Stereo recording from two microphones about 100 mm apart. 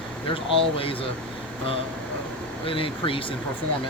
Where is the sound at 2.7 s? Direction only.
65° left (ahead or behind).